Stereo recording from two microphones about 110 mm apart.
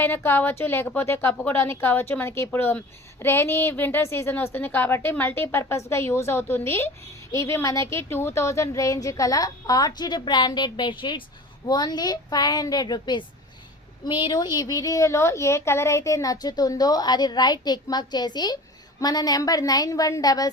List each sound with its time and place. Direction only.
0.0 s a woman's voice: 20° left (ahead or behind)